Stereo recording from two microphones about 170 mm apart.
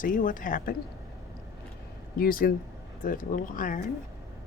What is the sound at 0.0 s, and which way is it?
Speech, 55° left (ahead or behind).